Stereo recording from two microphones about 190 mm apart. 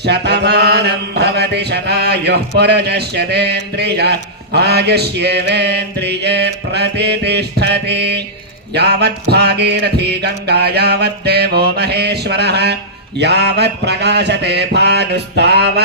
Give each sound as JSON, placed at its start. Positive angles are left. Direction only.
{"t": 0.0, "sound": "mantra", "side_deg": -60}